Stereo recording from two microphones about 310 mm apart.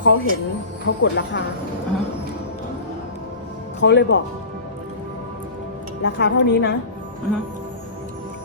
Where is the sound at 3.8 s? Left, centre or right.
Left.